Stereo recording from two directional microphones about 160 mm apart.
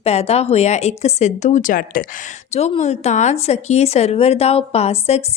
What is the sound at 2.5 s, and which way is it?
Speech, 45° left (ahead or behind).